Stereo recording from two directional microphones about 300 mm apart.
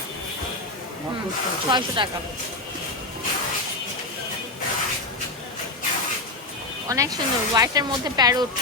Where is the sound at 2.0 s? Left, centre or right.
Centre.